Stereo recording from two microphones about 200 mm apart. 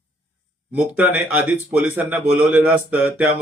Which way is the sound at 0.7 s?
10° right (ahead or behind).